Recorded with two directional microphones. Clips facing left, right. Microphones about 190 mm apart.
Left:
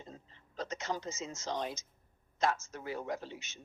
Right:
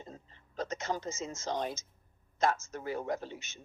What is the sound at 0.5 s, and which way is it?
A man's voice, 50° right (ahead or behind).